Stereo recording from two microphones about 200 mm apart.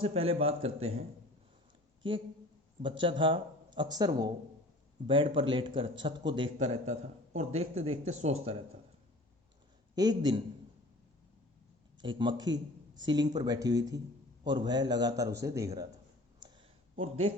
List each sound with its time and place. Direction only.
0.0 s speech: 30° right (ahead or behind)
2.0 s a woman's voice: 25° right (ahead or behind)
9.9 s speech: 20° right (ahead or behind)
12.0 s a man's voice: 25° right (ahead or behind)
16.4 s a sound: 20° right (ahead or behind)
16.9 s speech: 30° right (ahead or behind)